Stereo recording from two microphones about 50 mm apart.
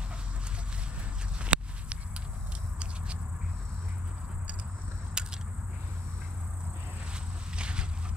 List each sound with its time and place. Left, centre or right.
1.4 s walk: right
5.2 s a sound: centre
7.5 s walk: centre